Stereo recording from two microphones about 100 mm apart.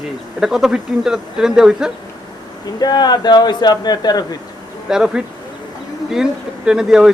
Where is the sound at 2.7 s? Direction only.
45° left (ahead or behind).